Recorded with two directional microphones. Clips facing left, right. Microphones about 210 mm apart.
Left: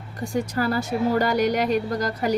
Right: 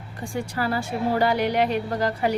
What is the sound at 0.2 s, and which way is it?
A woman's voice, 40° left (ahead or behind).